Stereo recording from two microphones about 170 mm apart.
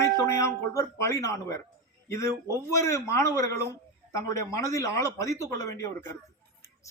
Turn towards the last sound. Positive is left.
turn(degrees=15)  # may be behind; listen again after turning